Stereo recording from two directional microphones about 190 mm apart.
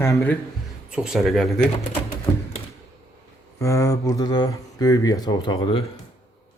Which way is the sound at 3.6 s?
15° left (ahead or behind).